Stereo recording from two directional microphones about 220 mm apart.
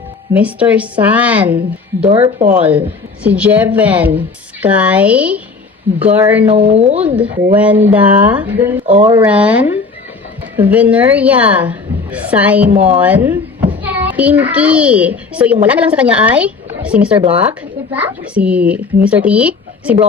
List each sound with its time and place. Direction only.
0.3 s a woman's voice: 5° right (ahead or behind)
2.0 s speech: 25° right (ahead or behind)
2.5 s a woman's voice: 5° right (ahead or behind)
6.5 s speech: 30° right (ahead or behind)
7.0 s a woman's voice: 5° right (ahead or behind)